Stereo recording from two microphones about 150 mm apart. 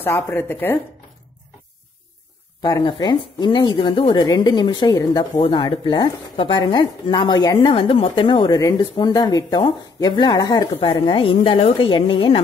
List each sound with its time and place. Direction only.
0.0 s a woman's voice: 15° left (ahead or behind)
2.6 s speech: 30° left (ahead or behind)
10.8 s speech: 35° left (ahead or behind)